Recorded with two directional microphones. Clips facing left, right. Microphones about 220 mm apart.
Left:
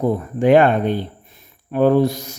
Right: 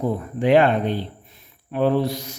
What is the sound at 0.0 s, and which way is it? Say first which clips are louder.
A man's voice: left 5 dB; 45° left (ahead or behind).